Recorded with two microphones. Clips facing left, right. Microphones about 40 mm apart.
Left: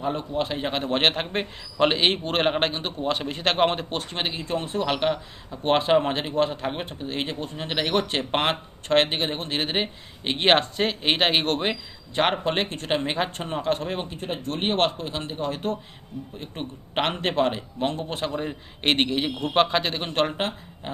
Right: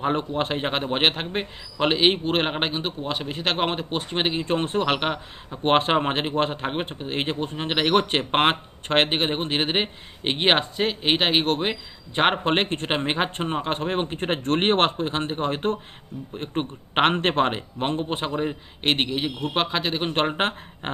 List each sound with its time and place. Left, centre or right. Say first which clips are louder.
0.0 s speech: right 2 dB; right
0.9 s a man's voice: left 2 dB; centre
4.1 s a man's voice: right 5 dB; centre
4.4 s a man's voice: right 3 dB; right
10.4 s a man's voice: left 1 dB; centre
12.1 s speech: right 2 dB; right
14.3 s speech: right 5 dB; right
18.8 s a man's voice: left 1 dB; centre
20.1 s a man's voice: left 2 dB; right
20.8 s a sound: right 3 dB; right